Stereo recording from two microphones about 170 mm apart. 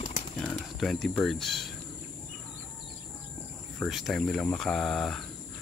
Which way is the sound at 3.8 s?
Centre (ahead or behind).